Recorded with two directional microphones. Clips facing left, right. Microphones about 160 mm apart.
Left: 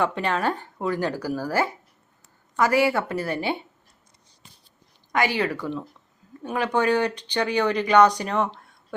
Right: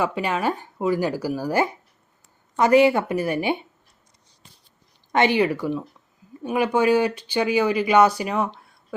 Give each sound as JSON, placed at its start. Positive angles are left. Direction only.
{"t": 0.0, "sound": "speech", "side_deg": -10}
{"t": 5.1, "sound": "speech", "side_deg": -20}